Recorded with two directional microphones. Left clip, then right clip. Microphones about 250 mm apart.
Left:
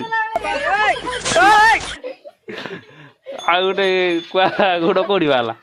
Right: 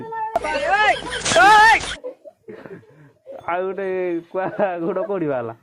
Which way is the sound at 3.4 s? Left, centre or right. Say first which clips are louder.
Left 8 dB; left.